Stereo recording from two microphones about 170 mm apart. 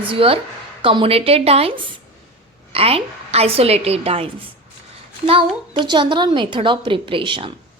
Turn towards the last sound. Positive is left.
turn(degrees=-30)  # may be behind; listen again after turning